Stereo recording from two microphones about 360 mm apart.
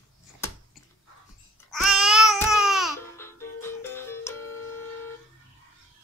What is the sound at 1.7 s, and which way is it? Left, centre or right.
Babbling, centre.